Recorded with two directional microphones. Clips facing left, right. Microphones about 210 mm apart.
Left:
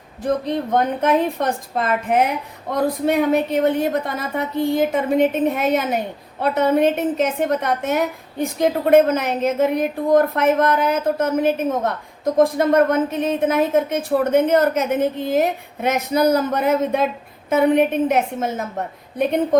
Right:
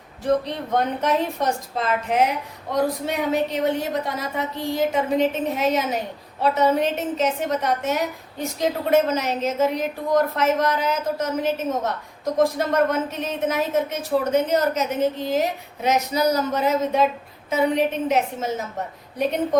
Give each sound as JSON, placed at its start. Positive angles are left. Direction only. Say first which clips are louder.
{"t": 0.4, "sound": "a woman's voice", "louder": "left 4 dB", "side_deg": 55}